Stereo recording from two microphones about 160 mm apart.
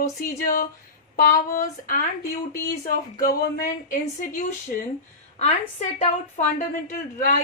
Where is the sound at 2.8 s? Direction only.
65° left (ahead or behind).